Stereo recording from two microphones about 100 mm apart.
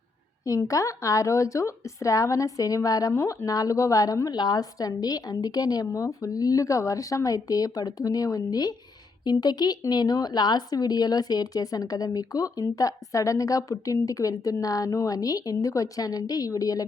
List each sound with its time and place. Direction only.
0.7 s speech: 35° left (ahead or behind)